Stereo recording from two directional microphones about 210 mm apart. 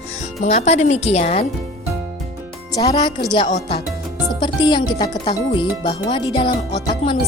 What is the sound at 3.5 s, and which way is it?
A woman's voice, 30° left (ahead or behind).